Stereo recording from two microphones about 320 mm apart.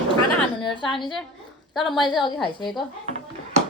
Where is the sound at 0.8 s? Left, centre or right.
Centre.